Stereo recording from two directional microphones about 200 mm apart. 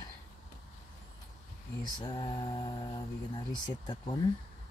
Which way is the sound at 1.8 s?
20° left (ahead or behind).